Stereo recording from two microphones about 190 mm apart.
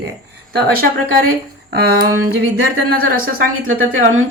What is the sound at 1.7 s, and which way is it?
A woman's voice, 55° right (ahead or behind).